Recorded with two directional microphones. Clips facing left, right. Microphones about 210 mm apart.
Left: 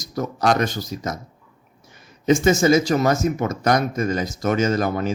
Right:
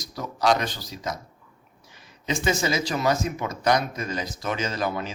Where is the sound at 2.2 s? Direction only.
45° left (ahead or behind).